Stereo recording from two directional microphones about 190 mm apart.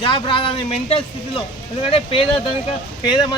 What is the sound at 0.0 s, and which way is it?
Speech, 25° left (ahead or behind).